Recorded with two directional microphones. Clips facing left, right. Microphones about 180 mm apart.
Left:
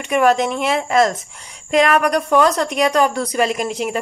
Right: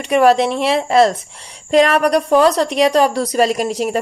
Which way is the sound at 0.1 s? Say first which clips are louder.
Right 3 dB; 35° right (ahead or behind).